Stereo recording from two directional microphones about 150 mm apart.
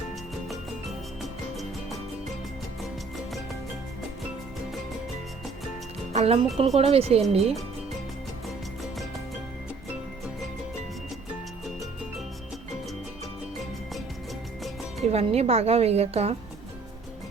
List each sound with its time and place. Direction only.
6.1 s speech: 40° right (ahead or behind)
15.0 s speech: 45° right (ahead or behind)